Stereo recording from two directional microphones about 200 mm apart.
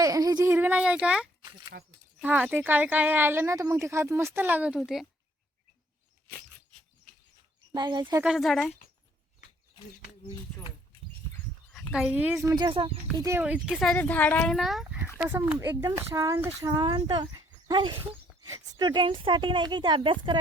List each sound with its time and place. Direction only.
0.0 s a sound: 20° right (ahead or behind)
2.2 s speech: 10° right (ahead or behind)
7.7 s speech: 20° right (ahead or behind)
8.2 s speech: centre (ahead or behind)
11.7 s speech: centre (ahead or behind); by 20.4 s 25° right (ahead or behind)